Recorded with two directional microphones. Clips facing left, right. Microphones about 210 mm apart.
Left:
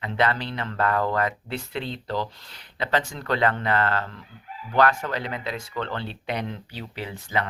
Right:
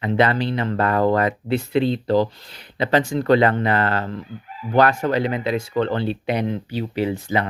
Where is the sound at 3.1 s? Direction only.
25° right (ahead or behind).